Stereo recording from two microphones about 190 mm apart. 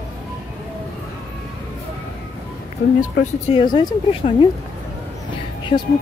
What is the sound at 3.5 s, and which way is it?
Speech, 20° left (ahead or behind).